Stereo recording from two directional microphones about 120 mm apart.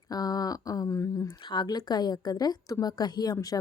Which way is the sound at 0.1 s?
30° left (ahead or behind).